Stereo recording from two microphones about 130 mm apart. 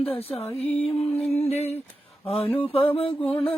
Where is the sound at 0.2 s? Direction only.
50° left (ahead or behind).